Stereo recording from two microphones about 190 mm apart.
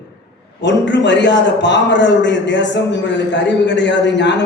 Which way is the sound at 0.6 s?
65° left (ahead or behind).